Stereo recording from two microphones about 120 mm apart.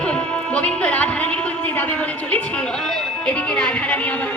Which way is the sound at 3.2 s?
10° left (ahead or behind).